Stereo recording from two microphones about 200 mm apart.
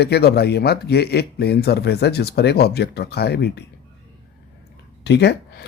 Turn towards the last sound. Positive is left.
turn(degrees=55)  # may be behind; listen again after turning